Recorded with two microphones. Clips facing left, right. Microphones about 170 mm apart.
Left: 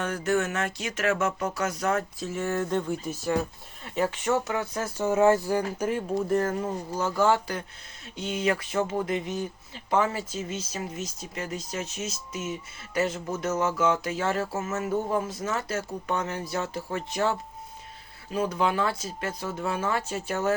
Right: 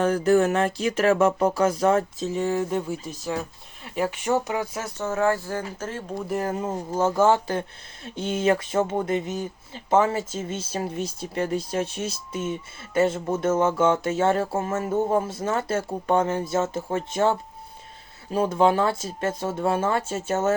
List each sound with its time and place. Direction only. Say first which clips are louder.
0.0 s speech: right 7 dB; 35° right (ahead or behind); by 3.3 s centre (ahead or behind)
3.9 s speech: right 2 dB; 10° right (ahead or behind)
4.9 s speech: left 3 dB; 15° left (ahead or behind)
6.4 s speech: right 1 dB; 20° right (ahead or behind)